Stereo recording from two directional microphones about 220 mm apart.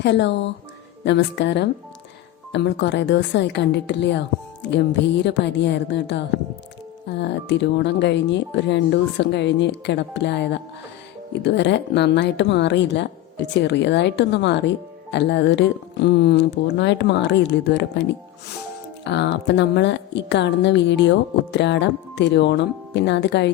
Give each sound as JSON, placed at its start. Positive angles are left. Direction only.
{"t": 0.0, "sound": "a woman's voice", "side_deg": 55}
{"t": 19.0, "sound": "a woman's voice", "side_deg": 50}